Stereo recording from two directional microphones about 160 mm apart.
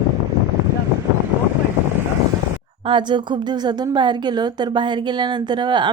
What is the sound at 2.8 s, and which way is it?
Speech, 30° right (ahead or behind).